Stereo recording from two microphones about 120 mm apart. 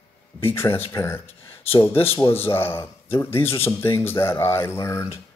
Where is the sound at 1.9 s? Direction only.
50° left (ahead or behind).